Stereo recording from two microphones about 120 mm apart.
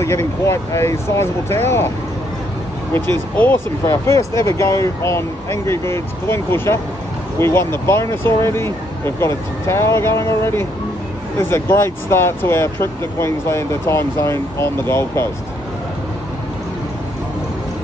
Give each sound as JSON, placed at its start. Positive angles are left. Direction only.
{"t": 0.5, "sound": "speech", "side_deg": 20}
{"t": 2.9, "sound": "speech", "side_deg": 20}